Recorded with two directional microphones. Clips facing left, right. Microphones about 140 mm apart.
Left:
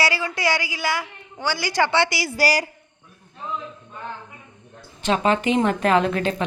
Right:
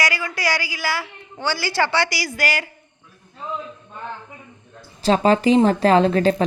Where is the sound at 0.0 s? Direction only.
30° left (ahead or behind).